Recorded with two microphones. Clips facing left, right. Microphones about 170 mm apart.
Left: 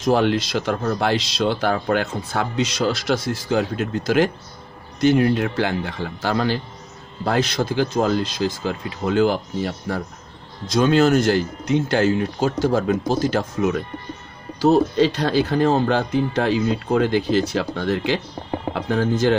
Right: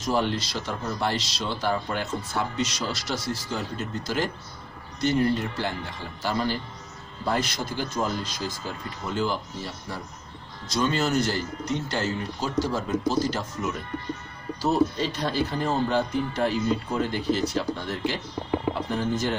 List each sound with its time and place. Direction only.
0.0 s speech: 70° left (ahead or behind)
3.2 s speech: 65° left (ahead or behind); by 11.8 s 85° left
11.9 s speech: 55° left (ahead or behind); by 12.5 s 75° left (ahead or behind)
12.5 s speech: 55° left (ahead or behind); by 19.4 s 90° left